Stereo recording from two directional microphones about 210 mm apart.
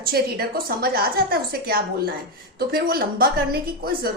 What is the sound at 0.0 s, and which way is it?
A woman's voice, 45° right (ahead or behind).